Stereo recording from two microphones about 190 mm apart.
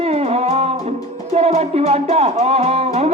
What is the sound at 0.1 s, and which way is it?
Music, 35° right (ahead or behind).